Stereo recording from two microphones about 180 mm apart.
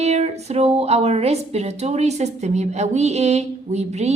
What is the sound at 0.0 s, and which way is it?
Speech, 35° right (ahead or behind).